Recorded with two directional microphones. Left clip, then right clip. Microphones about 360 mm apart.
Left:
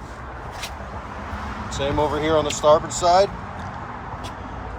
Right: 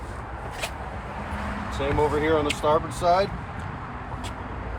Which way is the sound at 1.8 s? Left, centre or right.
Centre.